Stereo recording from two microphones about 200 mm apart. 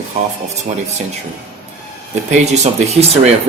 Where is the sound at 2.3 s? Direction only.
35° right (ahead or behind).